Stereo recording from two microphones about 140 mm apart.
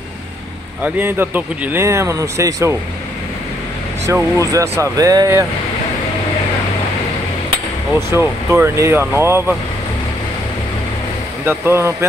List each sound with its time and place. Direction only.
0.8 s speech: 15° right (ahead or behind)
4.0 s speech: 20° right (ahead or behind)
8.1 s speech: 15° right (ahead or behind)
11.4 s speech: 20° right (ahead or behind)